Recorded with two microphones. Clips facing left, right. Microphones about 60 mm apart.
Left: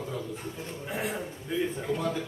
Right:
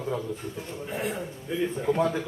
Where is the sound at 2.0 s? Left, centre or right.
Right.